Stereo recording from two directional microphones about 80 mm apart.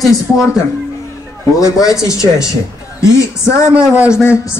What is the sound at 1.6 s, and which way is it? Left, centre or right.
Speech, left.